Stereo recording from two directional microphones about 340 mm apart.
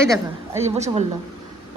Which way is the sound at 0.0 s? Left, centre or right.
Centre.